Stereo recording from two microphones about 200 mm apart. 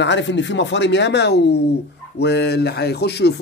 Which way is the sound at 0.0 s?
65° left (ahead or behind).